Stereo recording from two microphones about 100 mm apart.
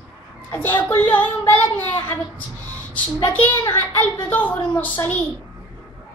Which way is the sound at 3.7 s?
25° left (ahead or behind).